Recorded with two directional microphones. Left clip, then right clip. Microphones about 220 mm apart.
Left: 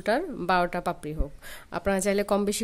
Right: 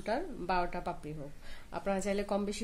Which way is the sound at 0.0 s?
50° left (ahead or behind).